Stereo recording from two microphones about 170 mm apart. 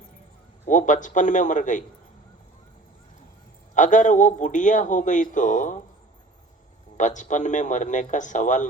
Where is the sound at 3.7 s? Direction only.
45° left (ahead or behind).